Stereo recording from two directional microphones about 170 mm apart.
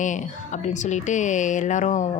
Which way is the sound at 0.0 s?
45° left (ahead or behind).